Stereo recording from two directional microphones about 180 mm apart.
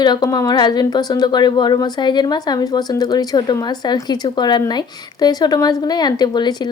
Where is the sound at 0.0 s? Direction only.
20° left (ahead or behind).